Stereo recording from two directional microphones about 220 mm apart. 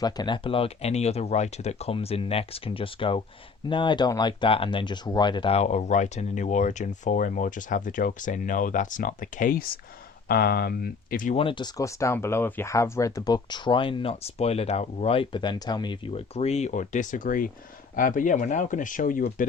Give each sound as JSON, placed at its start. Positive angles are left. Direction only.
{"t": 0.0, "sound": "speech", "side_deg": 20}
{"t": 11.3, "sound": "speech", "side_deg": 20}